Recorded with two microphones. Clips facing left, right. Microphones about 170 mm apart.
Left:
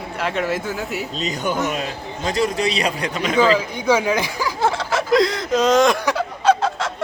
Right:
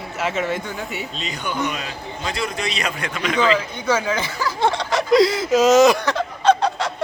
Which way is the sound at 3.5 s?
10° left (ahead or behind).